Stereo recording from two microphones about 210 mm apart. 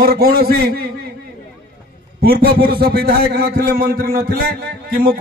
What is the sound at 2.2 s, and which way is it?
A man's voice, 50° right (ahead or behind).